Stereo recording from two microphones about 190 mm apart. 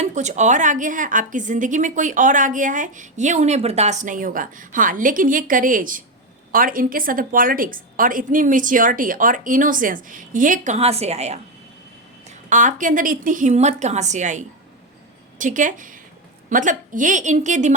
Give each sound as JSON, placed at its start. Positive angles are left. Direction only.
{"t": 0.0, "sound": "a woman's voice", "side_deg": -40}